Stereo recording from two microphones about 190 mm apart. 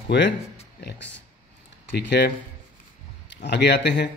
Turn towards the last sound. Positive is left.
turn(degrees=65)  # may be behind; listen again after turning